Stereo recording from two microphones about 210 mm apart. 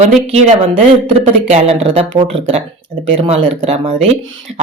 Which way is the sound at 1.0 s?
30° right (ahead or behind).